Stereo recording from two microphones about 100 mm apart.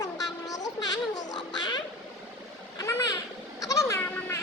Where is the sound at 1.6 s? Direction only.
45° left (ahead or behind).